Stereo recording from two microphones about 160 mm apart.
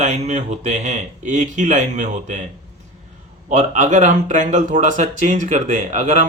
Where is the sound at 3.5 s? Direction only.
50° right (ahead or behind).